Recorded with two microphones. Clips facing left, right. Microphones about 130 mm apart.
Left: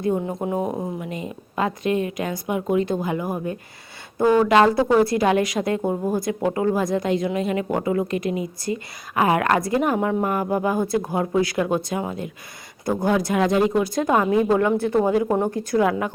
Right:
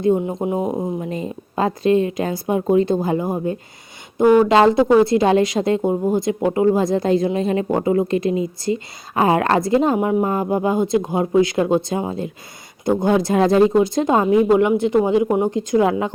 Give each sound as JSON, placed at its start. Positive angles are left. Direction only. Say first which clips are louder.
{"t": 0.0, "sound": "speech", "louder": "right 5 dB", "side_deg": -20}
{"t": 1.0, "sound": "speech", "louder": "right 5 dB", "side_deg": -35}